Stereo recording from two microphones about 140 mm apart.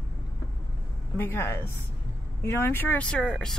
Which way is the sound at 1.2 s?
15° left (ahead or behind).